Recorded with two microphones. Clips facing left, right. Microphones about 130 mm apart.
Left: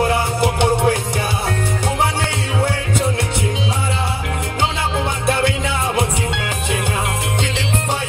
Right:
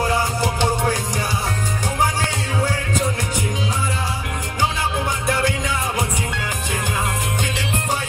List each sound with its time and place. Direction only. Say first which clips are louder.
0.0 s music: left 3 dB; 20° left (ahead or behind)
5.2 s music: left 4 dB; 25° left (ahead or behind)